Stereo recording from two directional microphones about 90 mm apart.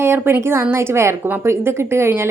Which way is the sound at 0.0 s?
25° right (ahead or behind).